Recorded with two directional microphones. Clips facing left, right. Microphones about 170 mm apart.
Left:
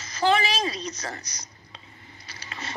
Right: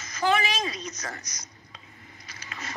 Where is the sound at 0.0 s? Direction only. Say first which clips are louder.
Left 2 dB; 30° left (ahead or behind).